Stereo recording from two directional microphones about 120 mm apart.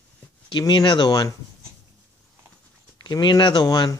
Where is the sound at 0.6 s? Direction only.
40° left (ahead or behind).